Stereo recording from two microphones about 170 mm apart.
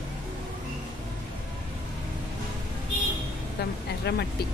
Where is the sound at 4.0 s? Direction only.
75° left (ahead or behind).